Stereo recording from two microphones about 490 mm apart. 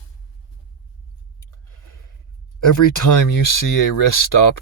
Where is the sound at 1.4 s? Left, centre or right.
Left.